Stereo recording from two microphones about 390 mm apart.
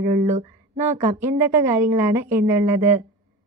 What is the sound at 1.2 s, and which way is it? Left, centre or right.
Speech, centre.